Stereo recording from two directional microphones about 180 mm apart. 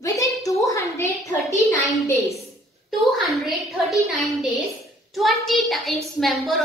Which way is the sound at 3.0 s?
Centre (ahead or behind).